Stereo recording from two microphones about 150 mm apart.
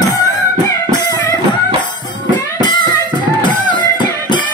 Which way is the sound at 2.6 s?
30° left (ahead or behind).